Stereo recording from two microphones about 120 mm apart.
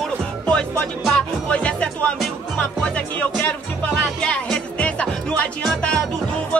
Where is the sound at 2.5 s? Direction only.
10° left (ahead or behind).